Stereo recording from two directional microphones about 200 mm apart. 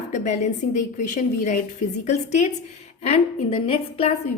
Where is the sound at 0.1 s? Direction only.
35° left (ahead or behind).